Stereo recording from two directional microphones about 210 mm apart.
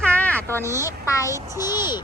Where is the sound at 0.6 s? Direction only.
15° right (ahead or behind).